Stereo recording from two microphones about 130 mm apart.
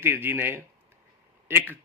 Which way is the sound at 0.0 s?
15° right (ahead or behind).